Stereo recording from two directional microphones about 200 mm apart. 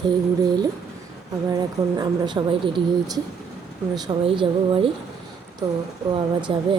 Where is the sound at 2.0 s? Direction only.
25° right (ahead or behind).